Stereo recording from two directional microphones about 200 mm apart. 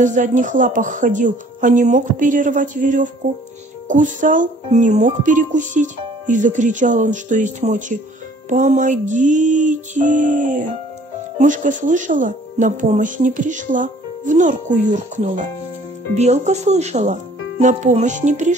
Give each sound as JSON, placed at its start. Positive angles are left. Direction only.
{"t": 0.0, "sound": "speech", "side_deg": -40}